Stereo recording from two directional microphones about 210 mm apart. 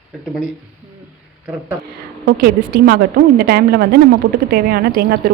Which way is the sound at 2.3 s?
45° right (ahead or behind).